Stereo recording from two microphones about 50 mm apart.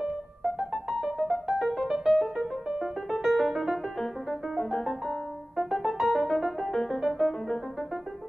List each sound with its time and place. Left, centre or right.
0.6 s music: centre
4.0 s piano: centre
5.6 s music: centre